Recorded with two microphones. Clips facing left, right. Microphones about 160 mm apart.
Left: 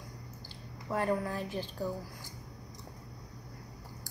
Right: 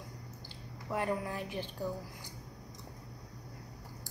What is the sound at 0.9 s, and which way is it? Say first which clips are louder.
Speech: left 3 dB; 15° right (ahead or behind).